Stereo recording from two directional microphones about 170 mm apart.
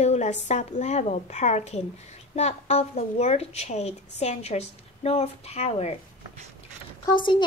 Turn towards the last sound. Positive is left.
turn(degrees=25)  # may be behind; listen again after turning